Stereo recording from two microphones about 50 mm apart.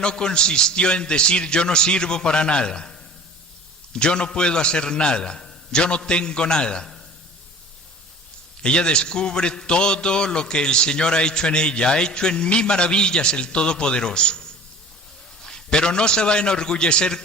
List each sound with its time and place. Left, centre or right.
0.0 s a man's voice: centre
3.9 s a man's voice: centre
8.6 s a man's voice: centre